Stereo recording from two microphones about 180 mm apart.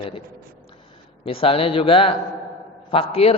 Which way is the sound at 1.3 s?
30° left (ahead or behind).